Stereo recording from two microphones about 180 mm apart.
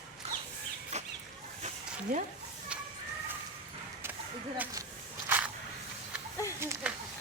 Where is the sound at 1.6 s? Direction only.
40° right (ahead or behind).